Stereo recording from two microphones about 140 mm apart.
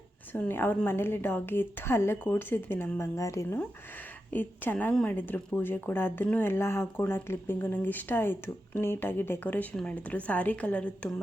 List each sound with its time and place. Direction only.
0.3 s speech: 15° left (ahead or behind)